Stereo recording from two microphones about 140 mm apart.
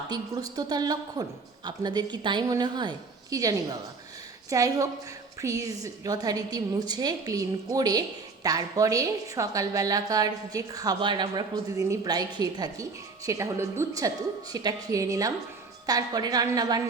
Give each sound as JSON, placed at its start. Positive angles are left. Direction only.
{"t": 0.1, "sound": "a woman's voice", "side_deg": -25}